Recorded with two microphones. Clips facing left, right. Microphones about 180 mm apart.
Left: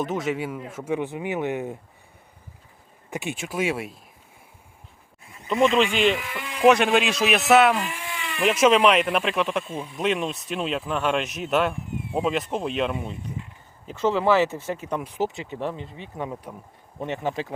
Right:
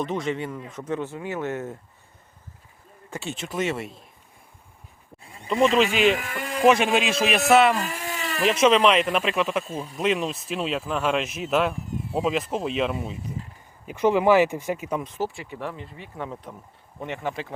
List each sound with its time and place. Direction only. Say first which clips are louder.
0.0 s speech: left 1 dB; 5° left (ahead or behind)
3.1 s speech: left 2 dB; 15° left (ahead or behind)
5.2 s a sound: even; 30° right (ahead or behind)
6.1 s speech: right 1 dB; 45° right (ahead or behind)
6.7 s speech: left 2 dB; centre (ahead or behind)
7.8 s a sound: right 1 dB; 40° right (ahead or behind)
8.6 s speech: left 1 dB; 5° left (ahead or behind)
13.8 s speech: right 2 dB; 15° right (ahead or behind)
15.0 s speech: left 2 dB; 15° left (ahead or behind)